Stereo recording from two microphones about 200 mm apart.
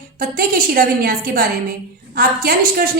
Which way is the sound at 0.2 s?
50° right (ahead or behind).